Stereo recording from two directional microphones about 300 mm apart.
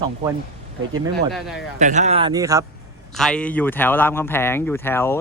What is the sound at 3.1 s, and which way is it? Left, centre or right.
Speech, centre.